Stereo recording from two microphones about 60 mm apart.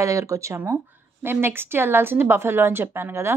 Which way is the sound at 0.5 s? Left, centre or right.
Right.